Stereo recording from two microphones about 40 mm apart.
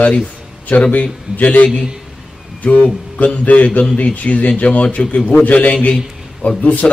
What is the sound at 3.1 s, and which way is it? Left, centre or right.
A man's voice, left.